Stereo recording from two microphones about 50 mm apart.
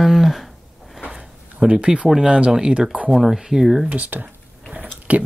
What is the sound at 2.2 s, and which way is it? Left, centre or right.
Speech, centre.